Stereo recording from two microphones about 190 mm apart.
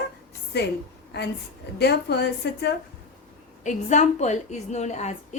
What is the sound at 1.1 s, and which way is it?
A woman's voice, 60° left (ahead or behind).